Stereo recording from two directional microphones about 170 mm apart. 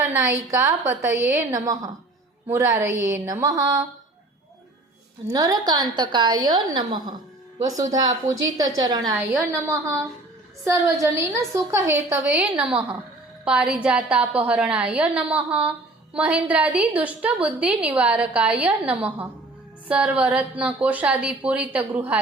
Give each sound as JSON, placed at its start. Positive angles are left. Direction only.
{"t": 0.0, "sound": "a woman's voice", "side_deg": -15}
{"t": 5.3, "sound": "a woman's voice", "side_deg": -20}